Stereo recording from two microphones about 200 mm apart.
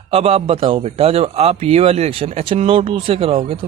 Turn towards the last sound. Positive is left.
turn(degrees=-30)  # may be behind; listen again after turning